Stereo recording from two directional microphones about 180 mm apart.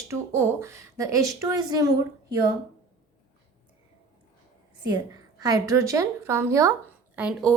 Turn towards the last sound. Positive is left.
turn(degrees=-5)  # may be behind; listen again after turning